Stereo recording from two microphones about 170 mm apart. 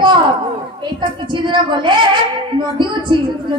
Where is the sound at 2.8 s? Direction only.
30° right (ahead or behind).